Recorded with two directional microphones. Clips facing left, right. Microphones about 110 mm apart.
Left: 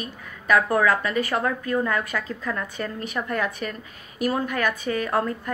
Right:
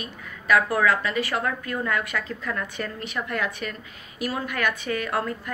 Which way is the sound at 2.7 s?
40° left (ahead or behind).